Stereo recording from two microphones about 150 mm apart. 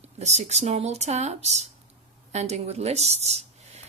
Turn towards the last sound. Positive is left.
turn(degrees=-45)  # may be behind; listen again after turning